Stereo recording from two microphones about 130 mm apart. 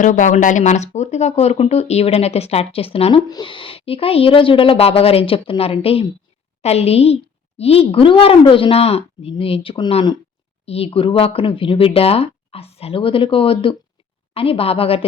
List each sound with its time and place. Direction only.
0.0 s speech: 80° left; by 3.2 s 45° left (ahead or behind)
3.2 s a woman's voice: 35° left (ahead or behind)
10.7 s a woman's voice: 50° left (ahead or behind)